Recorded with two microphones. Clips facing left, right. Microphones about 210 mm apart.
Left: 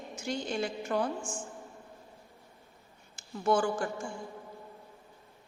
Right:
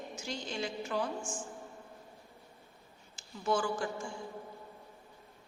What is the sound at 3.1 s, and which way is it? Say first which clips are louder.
Speech: left 5 dB; 55° left (ahead or behind).